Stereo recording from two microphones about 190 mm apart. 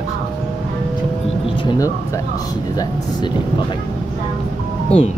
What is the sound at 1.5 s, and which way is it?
Speech, 20° left (ahead or behind).